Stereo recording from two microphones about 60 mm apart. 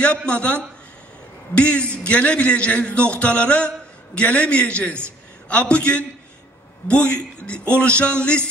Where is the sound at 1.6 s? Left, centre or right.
Centre.